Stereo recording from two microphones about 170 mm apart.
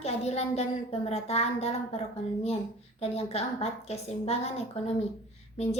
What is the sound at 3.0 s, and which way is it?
A woman's voice, 40° left (ahead or behind).